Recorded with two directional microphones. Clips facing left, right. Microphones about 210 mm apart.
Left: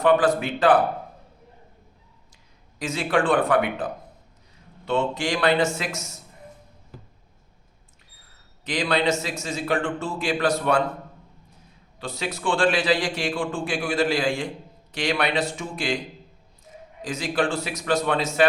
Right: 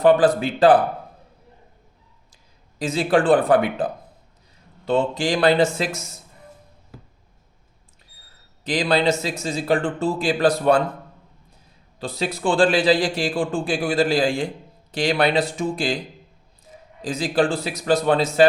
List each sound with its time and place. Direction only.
0.0 s a man's voice: 30° right (ahead or behind)
2.7 s a man's voice: 30° right (ahead or behind)
4.9 s a man's voice: 35° right (ahead or behind)
8.6 s a man's voice: 35° right (ahead or behind)
11.9 s a man's voice: 35° right (ahead or behind)
17.0 s a man's voice: 35° right (ahead or behind)